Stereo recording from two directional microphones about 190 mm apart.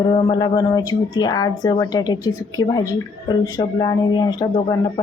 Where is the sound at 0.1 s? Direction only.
25° left (ahead or behind).